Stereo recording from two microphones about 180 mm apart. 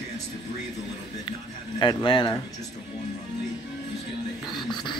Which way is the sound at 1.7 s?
25° left (ahead or behind).